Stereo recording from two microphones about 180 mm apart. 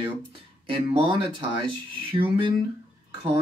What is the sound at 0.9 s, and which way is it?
Speech, 25° right (ahead or behind).